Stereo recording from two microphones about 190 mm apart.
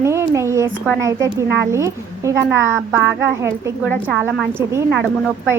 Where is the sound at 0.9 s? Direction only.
15° right (ahead or behind).